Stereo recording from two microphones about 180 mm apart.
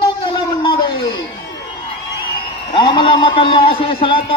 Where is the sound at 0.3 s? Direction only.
25° left (ahead or behind).